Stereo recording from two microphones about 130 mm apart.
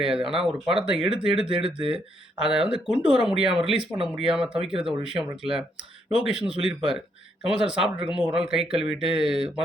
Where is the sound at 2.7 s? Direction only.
5° right (ahead or behind).